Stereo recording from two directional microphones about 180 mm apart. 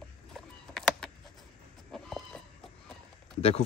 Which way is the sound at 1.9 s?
Centre (ahead or behind).